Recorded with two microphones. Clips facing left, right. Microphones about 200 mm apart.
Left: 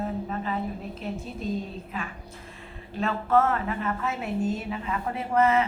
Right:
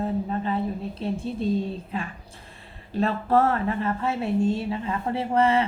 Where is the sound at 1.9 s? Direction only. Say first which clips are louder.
Right 3 dB; 30° right (ahead or behind).